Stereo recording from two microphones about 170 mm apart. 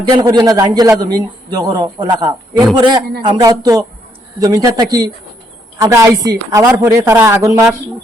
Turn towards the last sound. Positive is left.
turn(degrees=-20)  # may be behind; listen again after turning